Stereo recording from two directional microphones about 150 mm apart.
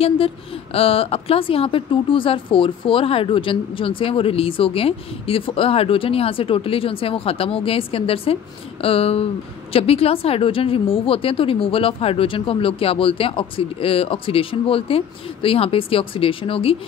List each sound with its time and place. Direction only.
0.7 s a woman's voice: 40° left (ahead or behind)